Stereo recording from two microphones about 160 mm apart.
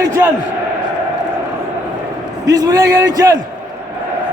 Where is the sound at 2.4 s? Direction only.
20° right (ahead or behind).